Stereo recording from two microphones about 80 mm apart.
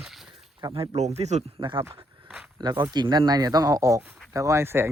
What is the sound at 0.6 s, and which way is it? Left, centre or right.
Speech, right.